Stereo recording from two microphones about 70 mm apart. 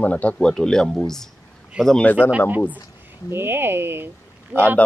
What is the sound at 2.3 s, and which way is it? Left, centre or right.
Speech, right.